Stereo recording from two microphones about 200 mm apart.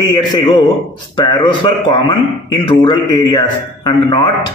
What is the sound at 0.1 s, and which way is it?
A man's voice, 25° left (ahead or behind).